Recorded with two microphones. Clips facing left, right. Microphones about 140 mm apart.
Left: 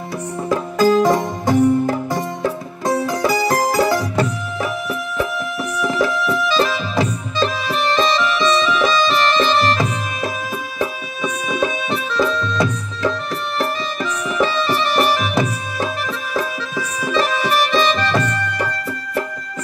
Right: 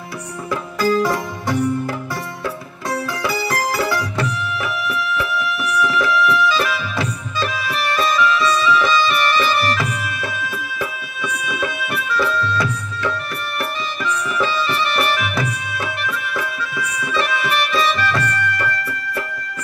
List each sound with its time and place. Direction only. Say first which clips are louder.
0.5 s music: left 4 dB; 20° left (ahead or behind)
4.8 s music: even; 20° left (ahead or behind)
11.4 s music: left 5 dB; 25° left (ahead or behind)
14.8 s music: left 3 dB; 20° left (ahead or behind)